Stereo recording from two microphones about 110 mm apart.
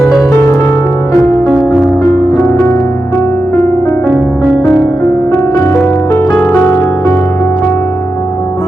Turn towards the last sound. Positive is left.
turn(degrees=20)  # may be behind; listen again after turning